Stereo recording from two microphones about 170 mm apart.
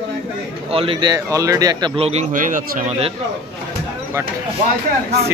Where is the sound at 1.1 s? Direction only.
20° right (ahead or behind).